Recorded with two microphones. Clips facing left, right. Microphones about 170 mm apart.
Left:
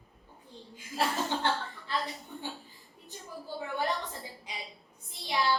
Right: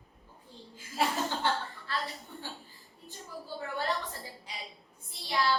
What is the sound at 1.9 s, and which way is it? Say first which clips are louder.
Speech: left 3 dB; 15° left (ahead or behind).